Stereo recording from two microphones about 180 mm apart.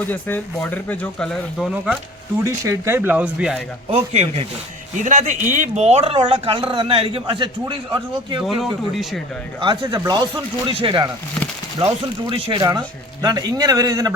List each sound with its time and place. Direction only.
0.1 s speech: 10° left (ahead or behind)
2.4 s speech: 15° right (ahead or behind)
3.9 s speech: 35° right (ahead or behind)
9.6 s speech: 25° right (ahead or behind)